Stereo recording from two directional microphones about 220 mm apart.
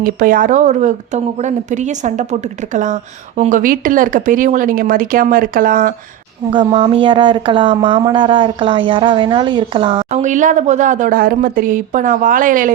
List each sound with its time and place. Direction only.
0.0 s a woman's voice: 40° right (ahead or behind)
6.5 s speech: 20° right (ahead or behind); by 12.7 s 35° right (ahead or behind)